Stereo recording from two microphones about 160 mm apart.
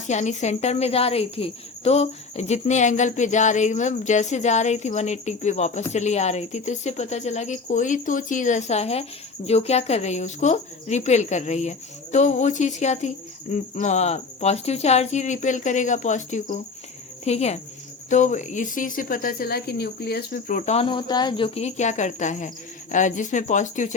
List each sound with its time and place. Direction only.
0.1 s speech: 45° left (ahead or behind)
20.7 s speech: 30° left (ahead or behind); by 23.9 s 50° left (ahead or behind)